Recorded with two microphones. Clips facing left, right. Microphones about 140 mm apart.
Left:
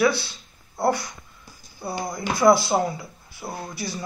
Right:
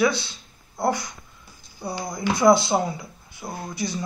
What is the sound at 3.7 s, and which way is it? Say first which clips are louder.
Speech: right 3 dB; 20° right (ahead or behind).